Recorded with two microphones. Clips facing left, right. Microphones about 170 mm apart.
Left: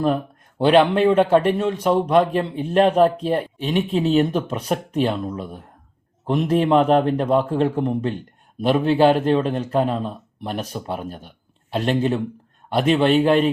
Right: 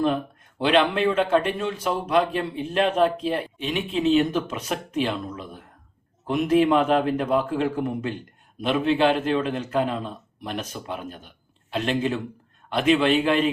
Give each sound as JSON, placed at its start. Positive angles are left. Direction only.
{"t": 0.6, "sound": "a man's voice", "side_deg": 35}